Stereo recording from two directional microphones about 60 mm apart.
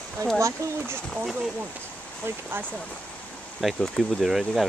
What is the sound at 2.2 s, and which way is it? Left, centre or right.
Speech, right.